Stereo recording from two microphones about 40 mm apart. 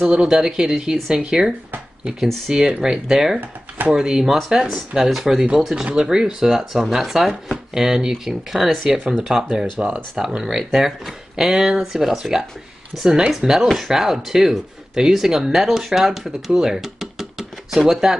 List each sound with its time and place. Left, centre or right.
0.0 s speech: centre
2.1 s speech: centre
2.5 s speech: centre
3.3 s speech: right
3.9 s speech: centre